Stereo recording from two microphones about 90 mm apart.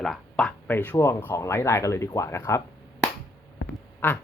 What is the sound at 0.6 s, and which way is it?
Speech, 20° left (ahead or behind).